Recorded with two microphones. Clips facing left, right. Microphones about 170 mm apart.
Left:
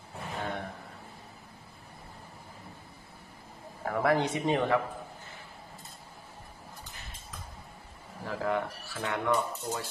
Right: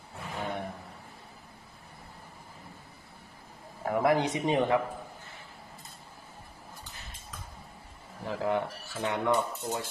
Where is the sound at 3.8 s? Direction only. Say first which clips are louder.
Right 1 dB; 20° right (ahead or behind).